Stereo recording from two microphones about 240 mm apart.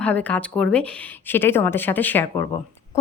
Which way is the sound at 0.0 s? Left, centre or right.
Centre.